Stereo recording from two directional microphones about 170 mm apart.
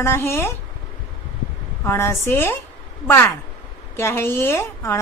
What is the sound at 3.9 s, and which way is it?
A woman's voice, 15° left (ahead or behind).